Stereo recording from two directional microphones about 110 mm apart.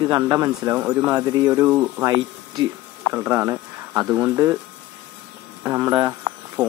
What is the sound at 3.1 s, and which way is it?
Speech, 20° right (ahead or behind).